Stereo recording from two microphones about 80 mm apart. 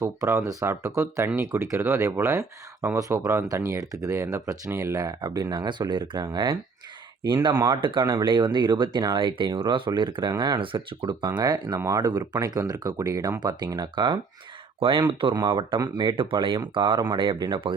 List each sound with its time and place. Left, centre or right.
0.6 s speech: right
7.5 s speech: right
7.8 s speech: right
8.2 s speech: right
11.3 s speech: right
11.9 s speech: right
12.1 s speech: right
14.8 s speech: right
15.4 s speech: right
17.2 s speech: right